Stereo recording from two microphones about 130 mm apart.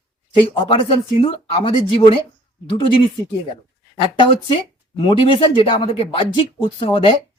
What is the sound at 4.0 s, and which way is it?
Speech, 40° left (ahead or behind).